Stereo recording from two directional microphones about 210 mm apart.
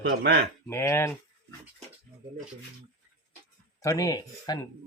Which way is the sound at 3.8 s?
15° left (ahead or behind).